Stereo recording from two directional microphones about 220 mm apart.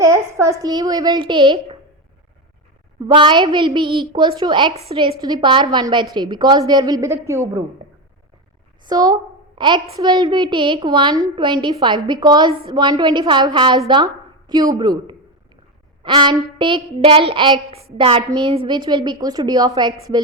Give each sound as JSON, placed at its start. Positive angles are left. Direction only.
{"t": 0.0, "sound": "a woman's voice", "side_deg": -15}
{"t": 3.1, "sound": "a woman's voice", "side_deg": -20}
{"t": 8.8, "sound": "a woman's voice", "side_deg": -20}